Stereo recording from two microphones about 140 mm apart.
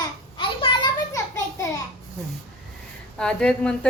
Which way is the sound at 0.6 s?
35° left (ahead or behind).